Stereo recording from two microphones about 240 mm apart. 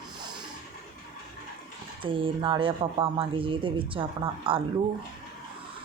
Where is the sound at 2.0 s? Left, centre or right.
Right.